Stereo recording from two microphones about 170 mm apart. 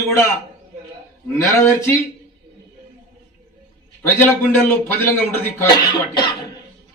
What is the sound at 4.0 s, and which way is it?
Speech, 15° left (ahead or behind).